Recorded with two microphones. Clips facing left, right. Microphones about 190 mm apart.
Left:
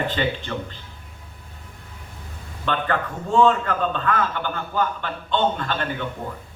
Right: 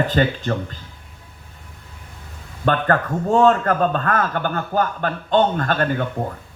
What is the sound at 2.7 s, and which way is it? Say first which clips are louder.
A man's voice: right 5 dB; 45° right (ahead or behind).